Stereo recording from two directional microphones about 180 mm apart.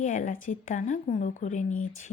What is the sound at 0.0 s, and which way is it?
Speech, 45° left (ahead or behind).